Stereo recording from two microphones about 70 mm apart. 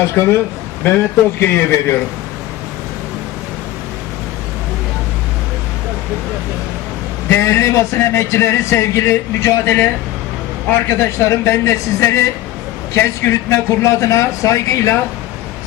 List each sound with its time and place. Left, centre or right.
0.1 s a man's voice: left
1.4 s a man's voice: left
7.3 s a man's voice: left